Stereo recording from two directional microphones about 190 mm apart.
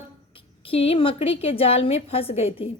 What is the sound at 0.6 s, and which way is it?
A woman's voice, 30° left (ahead or behind).